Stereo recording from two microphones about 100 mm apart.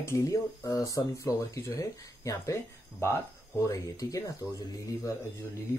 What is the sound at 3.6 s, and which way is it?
Speech, 35° left (ahead or behind).